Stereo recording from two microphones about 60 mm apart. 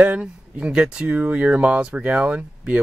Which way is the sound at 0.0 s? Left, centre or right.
Right.